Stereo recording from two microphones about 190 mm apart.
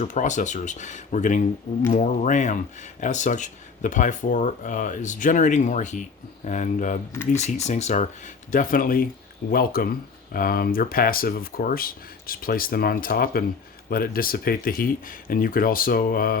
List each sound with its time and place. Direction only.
0.0 s speech: 40° left (ahead or behind)